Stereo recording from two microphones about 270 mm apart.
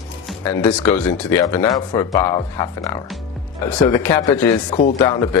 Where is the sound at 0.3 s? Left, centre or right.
Centre.